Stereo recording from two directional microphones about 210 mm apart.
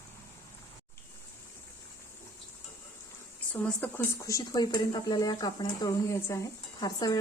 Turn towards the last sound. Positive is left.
turn(degrees=20)  # may be behind; listen again after turning